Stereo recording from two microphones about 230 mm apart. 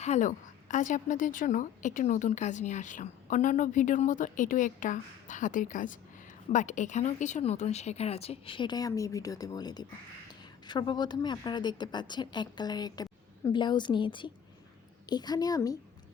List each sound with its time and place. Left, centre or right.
0.0 s a woman's voice: left; by 15.8 s centre